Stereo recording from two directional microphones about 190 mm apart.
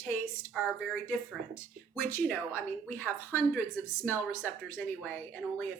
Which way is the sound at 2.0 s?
10° left (ahead or behind).